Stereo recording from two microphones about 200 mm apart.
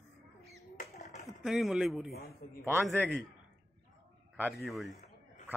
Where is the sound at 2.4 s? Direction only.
45° left (ahead or behind).